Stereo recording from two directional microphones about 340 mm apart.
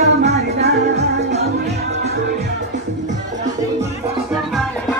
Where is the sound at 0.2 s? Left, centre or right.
Right.